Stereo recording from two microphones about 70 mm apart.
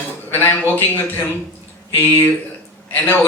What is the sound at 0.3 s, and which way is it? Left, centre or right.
A man's voice, left.